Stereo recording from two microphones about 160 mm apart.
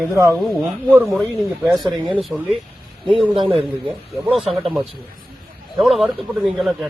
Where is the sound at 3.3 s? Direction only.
35° right (ahead or behind).